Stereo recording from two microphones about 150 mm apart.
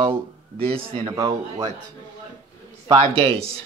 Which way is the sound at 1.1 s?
25° right (ahead or behind).